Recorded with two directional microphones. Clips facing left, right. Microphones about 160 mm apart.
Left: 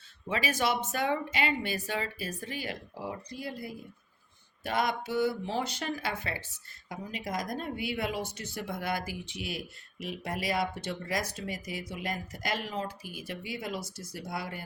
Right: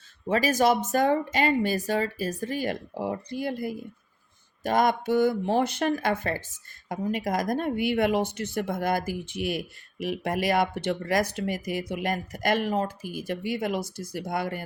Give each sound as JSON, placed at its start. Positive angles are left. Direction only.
{"t": 0.3, "sound": "speech", "side_deg": -40}
{"t": 3.0, "sound": "speech", "side_deg": -55}
{"t": 4.6, "sound": "speech", "side_deg": -45}